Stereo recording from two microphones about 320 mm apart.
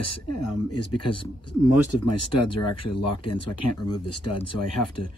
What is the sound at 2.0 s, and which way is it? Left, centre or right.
Speech, left.